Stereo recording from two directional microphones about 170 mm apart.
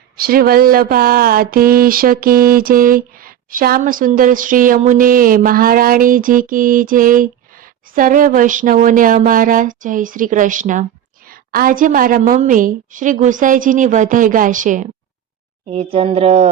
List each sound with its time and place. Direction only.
0.2 s a sound: 60° right (ahead or behind)
11.3 s a woman's voice: 60° right (ahead or behind)
15.7 s speech: 35° right (ahead or behind)